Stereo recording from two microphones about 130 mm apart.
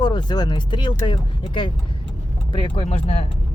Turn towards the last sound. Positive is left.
turn(degrees=50)  # may be behind; listen again after turning